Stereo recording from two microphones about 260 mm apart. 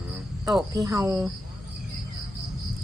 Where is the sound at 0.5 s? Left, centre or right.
Centre.